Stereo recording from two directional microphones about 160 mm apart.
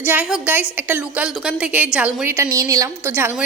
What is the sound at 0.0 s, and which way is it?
A woman's voice, 10° right (ahead or behind).